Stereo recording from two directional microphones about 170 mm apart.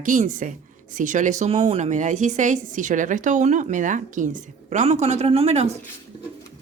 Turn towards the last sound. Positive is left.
turn(degrees=-40)  # may be behind; listen again after turning